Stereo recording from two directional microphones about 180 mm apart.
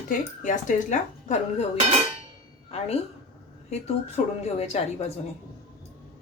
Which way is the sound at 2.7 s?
35° left (ahead or behind).